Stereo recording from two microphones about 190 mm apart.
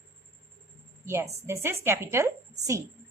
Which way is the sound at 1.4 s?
15° right (ahead or behind).